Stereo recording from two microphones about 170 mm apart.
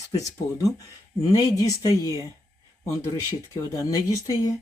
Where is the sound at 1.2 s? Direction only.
20° left (ahead or behind).